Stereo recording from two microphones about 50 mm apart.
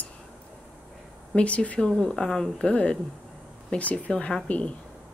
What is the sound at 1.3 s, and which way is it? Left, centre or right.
Speech, left.